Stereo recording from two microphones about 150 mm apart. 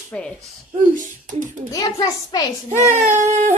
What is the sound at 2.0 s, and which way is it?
Speech, 25° left (ahead or behind).